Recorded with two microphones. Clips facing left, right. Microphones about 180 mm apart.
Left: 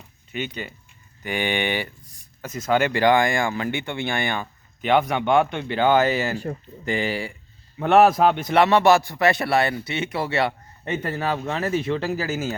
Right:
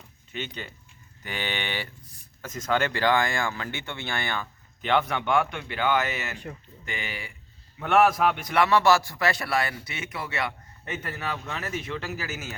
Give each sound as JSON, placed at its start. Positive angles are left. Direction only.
{"t": 0.3, "sound": "a man's voice", "side_deg": 10}